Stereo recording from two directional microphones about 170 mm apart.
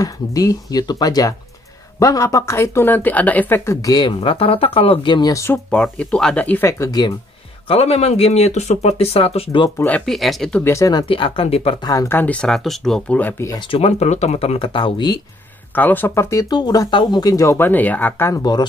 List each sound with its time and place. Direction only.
0.0 s speech: 20° left (ahead or behind)
7.6 s speech: 35° left (ahead or behind)
9.8 s speech: 10° left (ahead or behind)
10.6 s speech: 15° left (ahead or behind); by 11.9 s 35° left (ahead or behind)
11.9 s speech: 15° left (ahead or behind)
13.6 s speech: 35° left (ahead or behind)
15.7 s speech: 10° left (ahead or behind)